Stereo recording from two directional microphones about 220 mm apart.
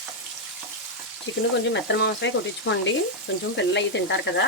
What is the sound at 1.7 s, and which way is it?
Speech, 50° left (ahead or behind).